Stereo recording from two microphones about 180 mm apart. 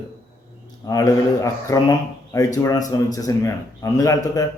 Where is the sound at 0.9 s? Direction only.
20° left (ahead or behind).